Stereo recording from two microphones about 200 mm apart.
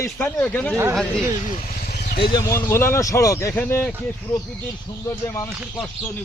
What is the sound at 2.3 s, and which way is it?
Speech, 15° left (ahead or behind).